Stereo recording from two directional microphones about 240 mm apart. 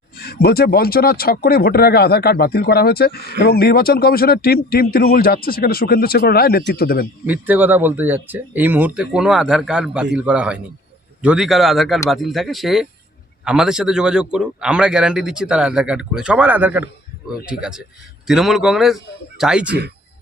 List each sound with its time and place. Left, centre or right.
0.2 s speech: left
7.3 s a man's voice: centre